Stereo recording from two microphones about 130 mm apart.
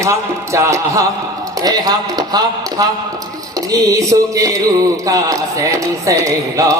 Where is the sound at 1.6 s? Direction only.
30° right (ahead or behind).